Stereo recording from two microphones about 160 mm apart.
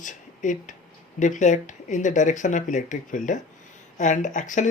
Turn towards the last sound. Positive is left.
turn(degrees=50)  # may be behind; listen again after turning